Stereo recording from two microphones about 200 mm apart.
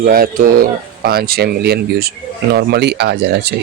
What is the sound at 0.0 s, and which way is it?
Speech, 45° right (ahead or behind).